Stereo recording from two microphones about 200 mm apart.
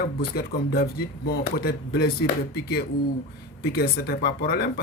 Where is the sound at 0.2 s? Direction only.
50° left (ahead or behind).